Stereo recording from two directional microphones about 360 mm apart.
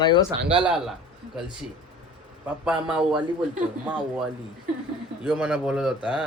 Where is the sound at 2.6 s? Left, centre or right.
Centre.